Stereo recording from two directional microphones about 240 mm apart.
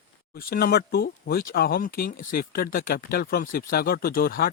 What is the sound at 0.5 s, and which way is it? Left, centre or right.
Speech, left.